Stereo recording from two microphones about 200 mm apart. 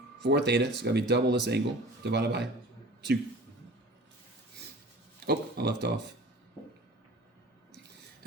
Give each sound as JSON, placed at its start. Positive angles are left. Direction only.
{"t": 0.2, "sound": "speech", "side_deg": -60}
{"t": 5.2, "sound": "speech", "side_deg": -55}